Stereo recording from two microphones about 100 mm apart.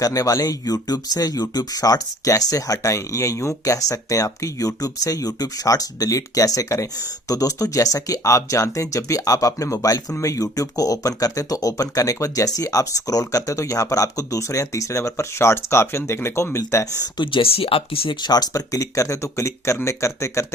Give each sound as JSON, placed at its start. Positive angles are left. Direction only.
{"t": 0.0, "sound": "speech", "side_deg": 35}
{"t": 17.2, "sound": "speech", "side_deg": 65}
{"t": 18.2, "sound": "speech", "side_deg": 40}